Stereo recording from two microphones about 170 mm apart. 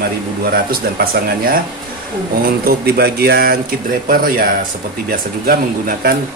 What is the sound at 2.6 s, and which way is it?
Speech, 65° right (ahead or behind).